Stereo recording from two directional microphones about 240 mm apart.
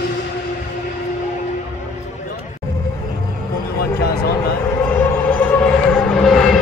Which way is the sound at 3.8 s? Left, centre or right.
Left.